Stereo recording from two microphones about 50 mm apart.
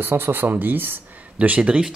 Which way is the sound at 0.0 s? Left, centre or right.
Right.